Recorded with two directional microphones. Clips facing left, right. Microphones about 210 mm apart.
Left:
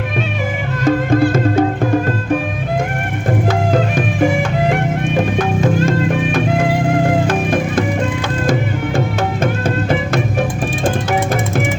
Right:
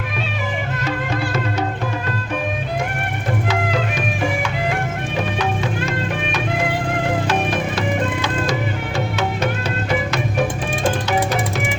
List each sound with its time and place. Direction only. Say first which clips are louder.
0.9 s music: left 13 dB; 50° left (ahead or behind)
3.5 s music: left 6 dB; 50° left (ahead or behind)
7.3 s music: left 4 dB; 50° left (ahead or behind)